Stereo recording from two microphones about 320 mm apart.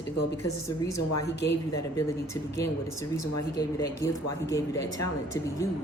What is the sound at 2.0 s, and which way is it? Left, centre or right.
Speech, centre.